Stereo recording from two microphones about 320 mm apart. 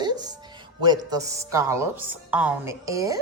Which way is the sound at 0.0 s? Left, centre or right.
Centre.